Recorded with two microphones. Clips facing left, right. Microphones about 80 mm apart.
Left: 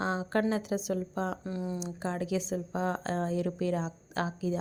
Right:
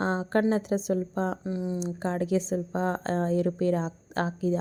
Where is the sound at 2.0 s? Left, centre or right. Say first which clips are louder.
Right 5 dB; right.